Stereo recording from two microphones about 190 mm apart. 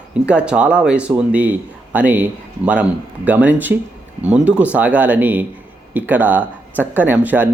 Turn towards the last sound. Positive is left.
turn(degrees=-10)  # may be behind; listen again after turning